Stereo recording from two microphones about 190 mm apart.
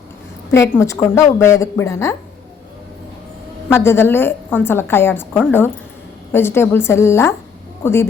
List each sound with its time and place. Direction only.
0.5 s a woman's voice: 15° left (ahead or behind)
3.7 s a woman's voice: 10° left (ahead or behind)